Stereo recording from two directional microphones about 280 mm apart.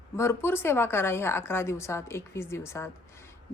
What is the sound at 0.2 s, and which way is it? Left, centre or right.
A woman's voice, centre.